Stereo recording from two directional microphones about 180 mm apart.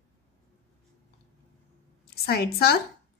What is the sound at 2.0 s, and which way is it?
Speech, 60° left (ahead or behind).